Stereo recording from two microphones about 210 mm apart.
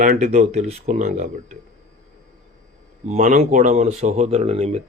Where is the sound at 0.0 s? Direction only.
40° right (ahead or behind).